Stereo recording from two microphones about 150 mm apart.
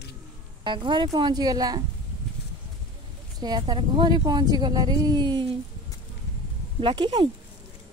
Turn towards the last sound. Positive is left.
turn(degrees=-30)  # may be behind; listen again after turning